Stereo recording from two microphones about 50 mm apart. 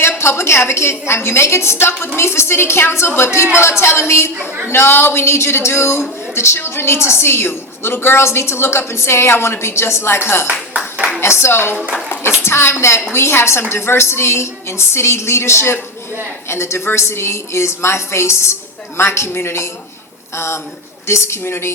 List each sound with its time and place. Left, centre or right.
0.2 s a woman's voice: left